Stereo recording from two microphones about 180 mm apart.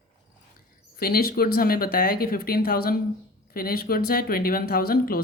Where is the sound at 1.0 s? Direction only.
60° left (ahead or behind).